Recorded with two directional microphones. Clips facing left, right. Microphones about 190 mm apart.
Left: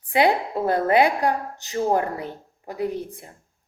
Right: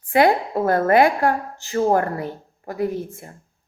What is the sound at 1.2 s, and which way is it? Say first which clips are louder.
Speech: right 2 dB; 15° left (ahead or behind).